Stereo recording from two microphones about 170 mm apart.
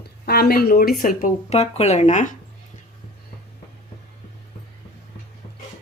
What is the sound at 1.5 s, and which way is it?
Speech, 40° left (ahead or behind).